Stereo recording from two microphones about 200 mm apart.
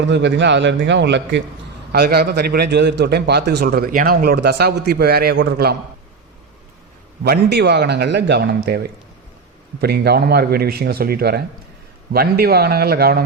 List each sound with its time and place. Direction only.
0.1 s a man's voice: 60° right (ahead or behind)
7.3 s a man's voice: 55° right (ahead or behind)